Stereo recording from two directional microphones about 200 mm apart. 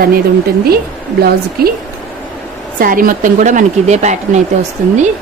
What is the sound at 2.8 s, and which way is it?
A woman's voice, 45° right (ahead or behind).